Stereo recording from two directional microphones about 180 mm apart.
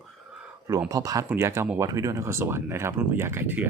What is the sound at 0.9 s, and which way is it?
Speech, 20° right (ahead or behind).